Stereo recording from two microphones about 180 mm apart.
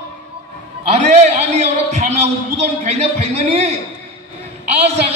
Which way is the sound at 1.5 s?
40° right (ahead or behind).